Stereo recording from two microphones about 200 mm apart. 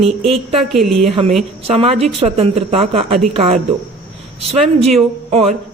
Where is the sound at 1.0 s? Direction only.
30° right (ahead or behind).